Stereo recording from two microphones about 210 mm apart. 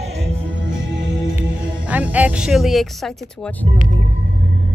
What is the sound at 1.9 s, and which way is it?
Speech, 5° right (ahead or behind).